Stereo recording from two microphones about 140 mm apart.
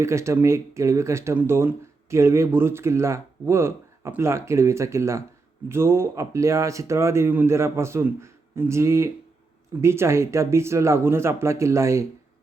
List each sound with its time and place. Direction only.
0.0 s speech: 20° right (ahead or behind)